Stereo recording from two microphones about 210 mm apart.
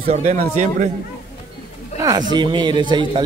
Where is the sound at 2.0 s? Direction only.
20° right (ahead or behind).